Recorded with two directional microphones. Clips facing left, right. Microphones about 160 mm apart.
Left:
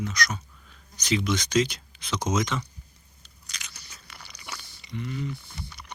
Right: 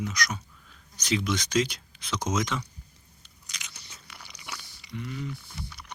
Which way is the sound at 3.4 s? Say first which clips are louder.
Left 1 dB; 20° right (ahead or behind).